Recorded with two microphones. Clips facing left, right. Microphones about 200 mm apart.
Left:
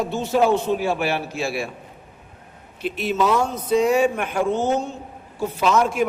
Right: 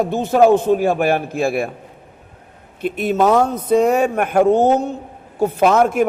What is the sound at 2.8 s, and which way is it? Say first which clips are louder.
A man's voice: right 5 dB; 50° right (ahead or behind).